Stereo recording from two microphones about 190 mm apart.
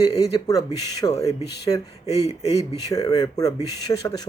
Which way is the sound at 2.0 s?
35° left (ahead or behind).